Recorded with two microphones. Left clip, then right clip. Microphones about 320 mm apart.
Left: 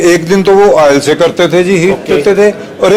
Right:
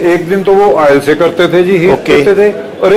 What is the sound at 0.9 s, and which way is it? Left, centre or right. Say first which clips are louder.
A man's voice: even; left.